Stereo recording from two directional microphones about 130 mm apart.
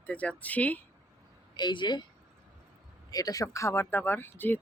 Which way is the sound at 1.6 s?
35° left (ahead or behind).